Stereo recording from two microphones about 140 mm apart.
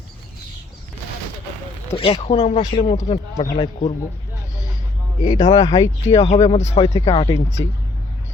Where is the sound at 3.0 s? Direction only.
45° left (ahead or behind).